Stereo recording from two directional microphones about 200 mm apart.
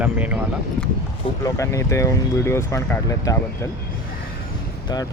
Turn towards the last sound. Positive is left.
turn(degrees=15)  # may be behind; listen again after turning